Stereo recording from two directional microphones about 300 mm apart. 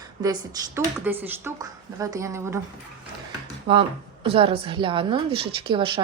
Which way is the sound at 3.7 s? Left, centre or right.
Centre.